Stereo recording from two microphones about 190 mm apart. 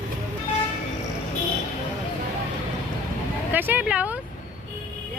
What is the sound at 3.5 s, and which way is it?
Speech, 10° right (ahead or behind).